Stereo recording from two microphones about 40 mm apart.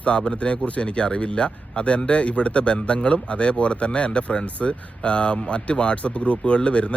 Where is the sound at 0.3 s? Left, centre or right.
Left.